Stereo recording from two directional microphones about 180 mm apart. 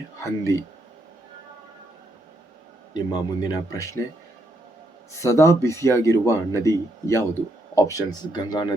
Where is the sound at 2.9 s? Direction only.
25° left (ahead or behind).